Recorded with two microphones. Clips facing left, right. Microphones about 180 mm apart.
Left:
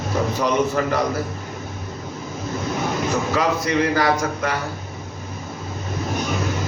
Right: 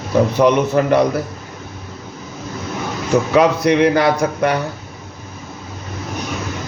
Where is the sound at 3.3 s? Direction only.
65° right (ahead or behind).